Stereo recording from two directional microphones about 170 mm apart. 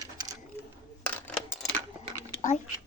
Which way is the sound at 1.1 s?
10° left (ahead or behind).